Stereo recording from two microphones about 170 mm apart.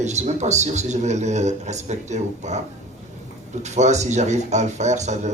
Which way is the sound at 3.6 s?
40° right (ahead or behind).